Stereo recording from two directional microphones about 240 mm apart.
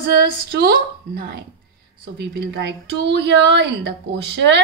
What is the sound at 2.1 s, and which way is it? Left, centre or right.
A woman's voice, right.